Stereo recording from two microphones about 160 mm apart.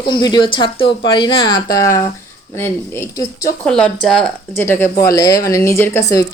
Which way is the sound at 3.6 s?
5° left (ahead or behind).